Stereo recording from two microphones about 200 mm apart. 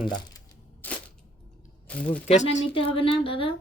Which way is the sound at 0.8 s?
10° left (ahead or behind).